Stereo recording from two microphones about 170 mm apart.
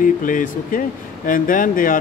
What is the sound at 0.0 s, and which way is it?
Speech, 50° left (ahead or behind).